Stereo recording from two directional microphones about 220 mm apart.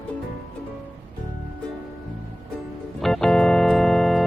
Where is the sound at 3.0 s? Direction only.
Centre (ahead or behind).